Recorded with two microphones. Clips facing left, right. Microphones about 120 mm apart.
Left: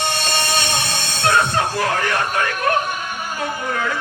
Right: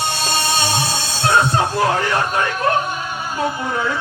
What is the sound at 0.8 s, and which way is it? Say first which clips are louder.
Music: right 2 dB; 30° right (ahead or behind).